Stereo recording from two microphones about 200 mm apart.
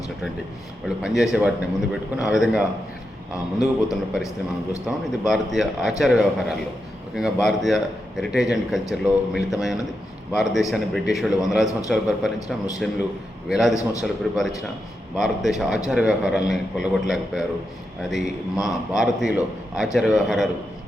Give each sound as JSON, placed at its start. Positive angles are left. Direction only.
{"t": 1.0, "sound": "speech", "side_deg": 0}
{"t": 3.3, "sound": "a man's voice", "side_deg": 15}
{"t": 4.9, "sound": "speech", "side_deg": 0}
{"t": 18.6, "sound": "speech", "side_deg": 0}